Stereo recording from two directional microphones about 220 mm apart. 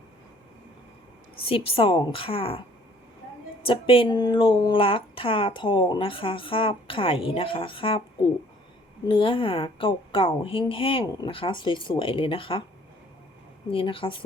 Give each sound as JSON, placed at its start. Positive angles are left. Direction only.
{"t": 1.5, "sound": "speech", "side_deg": 25}
{"t": 3.6, "sound": "speech", "side_deg": 25}
{"t": 9.0, "sound": "speech", "side_deg": 25}
{"t": 13.7, "sound": "speech", "side_deg": 25}